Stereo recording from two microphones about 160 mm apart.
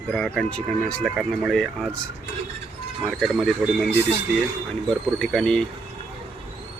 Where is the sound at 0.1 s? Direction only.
5° left (ahead or behind).